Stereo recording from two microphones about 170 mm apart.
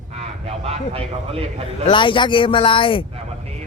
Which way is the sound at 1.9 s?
30° left (ahead or behind).